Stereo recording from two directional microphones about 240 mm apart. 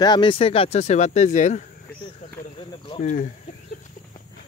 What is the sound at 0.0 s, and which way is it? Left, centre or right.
A man's voice, centre.